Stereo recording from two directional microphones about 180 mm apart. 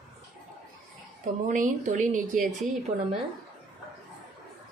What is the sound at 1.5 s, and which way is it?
Speech, 45° right (ahead or behind).